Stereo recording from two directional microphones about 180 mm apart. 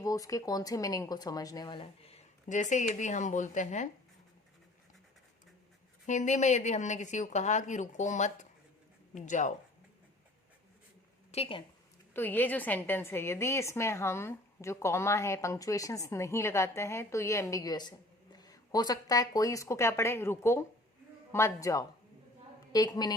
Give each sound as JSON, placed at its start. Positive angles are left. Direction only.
{"t": 0.0, "sound": "speech", "side_deg": 20}
{"t": 6.1, "sound": "speech", "side_deg": 40}
{"t": 11.3, "sound": "a woman's voice", "side_deg": 30}
{"t": 12.1, "sound": "a woman's voice", "side_deg": 10}